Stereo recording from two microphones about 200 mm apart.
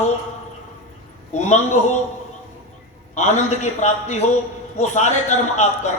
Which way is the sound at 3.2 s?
35° left (ahead or behind).